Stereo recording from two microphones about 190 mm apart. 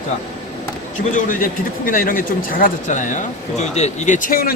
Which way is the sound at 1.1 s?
45° left (ahead or behind).